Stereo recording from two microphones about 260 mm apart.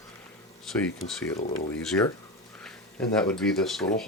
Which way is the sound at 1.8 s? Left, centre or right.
Centre.